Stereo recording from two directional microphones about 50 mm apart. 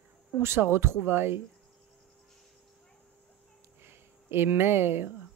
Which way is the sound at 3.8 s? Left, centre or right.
Right.